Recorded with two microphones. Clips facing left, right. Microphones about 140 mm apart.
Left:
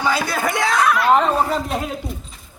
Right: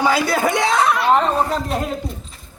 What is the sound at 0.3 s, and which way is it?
Speech, 20° right (ahead or behind).